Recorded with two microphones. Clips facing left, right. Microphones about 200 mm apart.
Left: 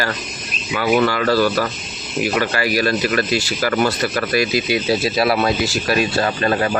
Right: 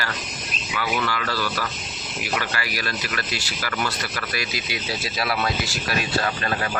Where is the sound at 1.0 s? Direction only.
40° left (ahead or behind); by 5.0 s 60° left (ahead or behind).